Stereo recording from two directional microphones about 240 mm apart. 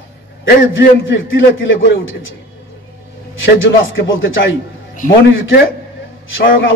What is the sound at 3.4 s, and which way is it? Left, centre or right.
A man's voice, left.